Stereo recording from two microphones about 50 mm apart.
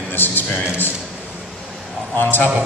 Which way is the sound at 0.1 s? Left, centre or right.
Left.